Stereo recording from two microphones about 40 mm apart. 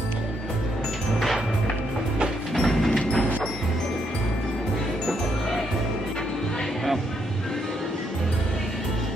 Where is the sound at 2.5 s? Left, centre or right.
Centre.